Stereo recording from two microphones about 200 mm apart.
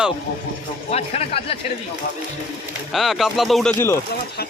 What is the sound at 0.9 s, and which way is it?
Speech, 30° left (ahead or behind).